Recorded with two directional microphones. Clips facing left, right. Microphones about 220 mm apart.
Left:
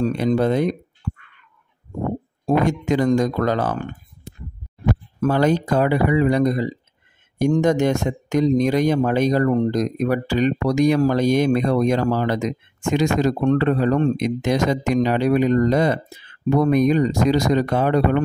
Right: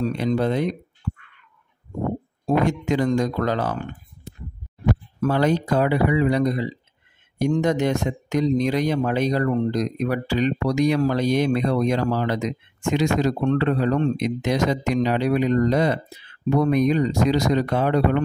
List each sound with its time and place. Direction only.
0.0 s speech: 45° left (ahead or behind)
2.4 s speech: 50° left (ahead or behind)
5.2 s speech: 45° left (ahead or behind)